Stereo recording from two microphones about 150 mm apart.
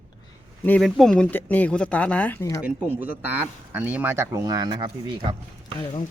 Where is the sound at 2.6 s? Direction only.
10° right (ahead or behind); by 4.9 s 30° right (ahead or behind).